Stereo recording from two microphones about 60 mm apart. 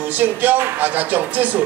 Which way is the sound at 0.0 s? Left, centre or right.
Right.